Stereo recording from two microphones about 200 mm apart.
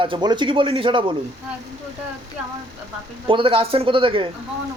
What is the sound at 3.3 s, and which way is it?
A man's voice, 25° right (ahead or behind).